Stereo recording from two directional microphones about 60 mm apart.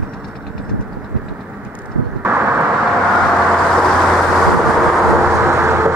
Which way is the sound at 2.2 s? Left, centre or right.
Right.